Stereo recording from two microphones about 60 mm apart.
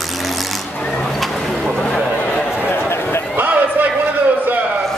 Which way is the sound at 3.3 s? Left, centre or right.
Right.